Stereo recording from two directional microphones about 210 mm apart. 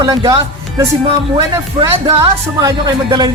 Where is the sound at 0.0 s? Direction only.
15° right (ahead or behind).